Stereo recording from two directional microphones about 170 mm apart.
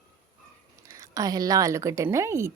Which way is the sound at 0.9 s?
20° right (ahead or behind).